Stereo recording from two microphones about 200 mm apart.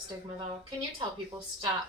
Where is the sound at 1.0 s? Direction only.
20° right (ahead or behind).